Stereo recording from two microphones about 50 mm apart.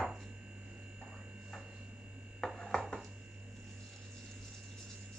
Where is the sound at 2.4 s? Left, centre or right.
Centre.